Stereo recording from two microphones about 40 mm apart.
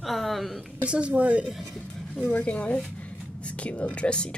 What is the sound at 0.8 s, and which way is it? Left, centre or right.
Speech, right.